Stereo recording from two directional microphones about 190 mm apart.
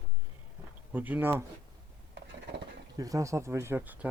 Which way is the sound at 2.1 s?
65° right (ahead or behind).